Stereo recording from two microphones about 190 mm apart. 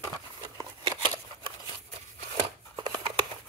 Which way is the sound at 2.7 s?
20° right (ahead or behind).